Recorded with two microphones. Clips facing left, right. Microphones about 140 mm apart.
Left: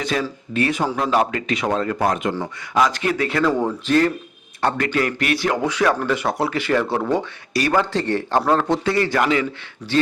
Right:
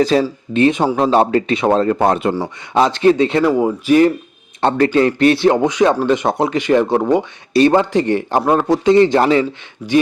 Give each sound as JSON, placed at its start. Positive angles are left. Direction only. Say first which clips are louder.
{"t": 0.0, "sound": "a man's voice", "louder": "right 9 dB", "side_deg": -30}
{"t": 4.6, "sound": "a man's voice", "louder": "right 7 dB", "side_deg": -30}
{"t": 7.9, "sound": "a man's voice", "louder": "right 5 dB", "side_deg": -15}
{"t": 9.2, "sound": "speech", "louder": "right 6 dB", "side_deg": -35}